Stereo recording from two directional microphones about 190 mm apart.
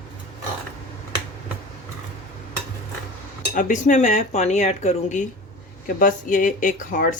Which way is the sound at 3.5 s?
45° left (ahead or behind).